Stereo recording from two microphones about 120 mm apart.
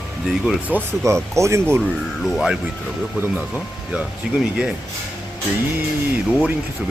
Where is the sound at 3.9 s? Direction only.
5° right (ahead or behind).